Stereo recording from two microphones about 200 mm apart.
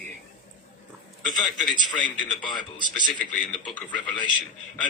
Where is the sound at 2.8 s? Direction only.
20° left (ahead or behind).